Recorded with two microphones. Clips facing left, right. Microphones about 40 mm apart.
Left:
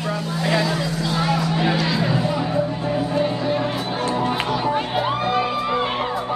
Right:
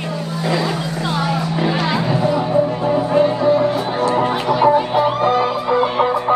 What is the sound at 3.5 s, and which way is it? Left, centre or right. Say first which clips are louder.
Music: right 6 dB; left.